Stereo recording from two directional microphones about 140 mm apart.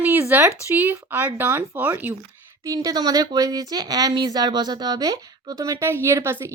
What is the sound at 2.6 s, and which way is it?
Speech, 25° right (ahead or behind).